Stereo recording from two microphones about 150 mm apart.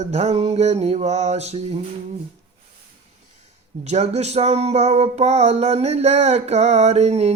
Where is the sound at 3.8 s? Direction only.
45° right (ahead or behind).